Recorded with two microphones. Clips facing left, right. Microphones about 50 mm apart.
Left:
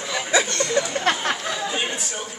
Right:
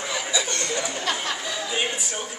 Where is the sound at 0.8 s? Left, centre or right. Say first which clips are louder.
Left 5 dB; left.